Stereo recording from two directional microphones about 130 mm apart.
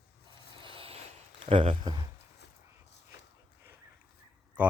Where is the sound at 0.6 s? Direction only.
45° right (ahead or behind).